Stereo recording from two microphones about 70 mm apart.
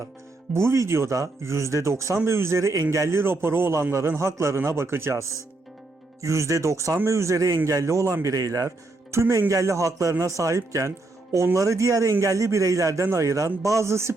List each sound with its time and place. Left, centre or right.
0.5 s a man's voice: right
3.2 s a man's voice: right